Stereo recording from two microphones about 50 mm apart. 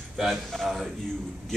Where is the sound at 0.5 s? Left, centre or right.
Centre.